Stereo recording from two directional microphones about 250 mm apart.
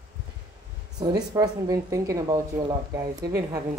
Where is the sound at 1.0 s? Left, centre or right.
Centre.